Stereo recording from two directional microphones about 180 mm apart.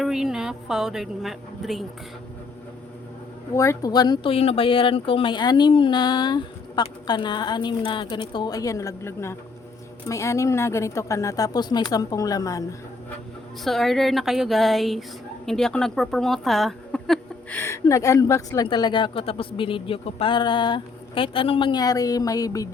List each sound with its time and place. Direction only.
0.0 s a woman's voice: 5° right (ahead or behind)
3.5 s a woman's voice: 15° left (ahead or behind)
13.7 s a woman's voice: centre (ahead or behind); by 22.7 s 20° left (ahead or behind)